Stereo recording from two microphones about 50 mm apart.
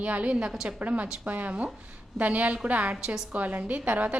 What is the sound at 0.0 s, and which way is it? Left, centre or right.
A woman's voice, right.